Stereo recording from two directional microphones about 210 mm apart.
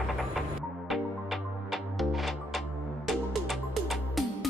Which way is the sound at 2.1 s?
Centre (ahead or behind).